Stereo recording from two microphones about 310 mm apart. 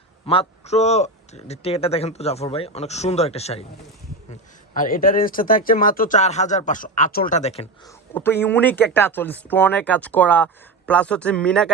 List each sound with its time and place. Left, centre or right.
0.3 s a man's voice: centre
8.1 s speech: centre